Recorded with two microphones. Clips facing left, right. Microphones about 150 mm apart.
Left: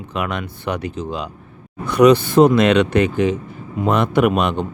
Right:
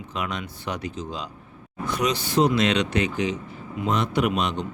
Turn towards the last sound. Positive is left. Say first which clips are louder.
# left 7 dB
turn(degrees=55)  # may be behind; listen again after turning